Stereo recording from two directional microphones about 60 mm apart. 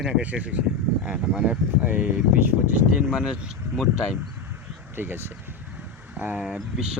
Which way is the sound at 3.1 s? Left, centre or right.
Centre.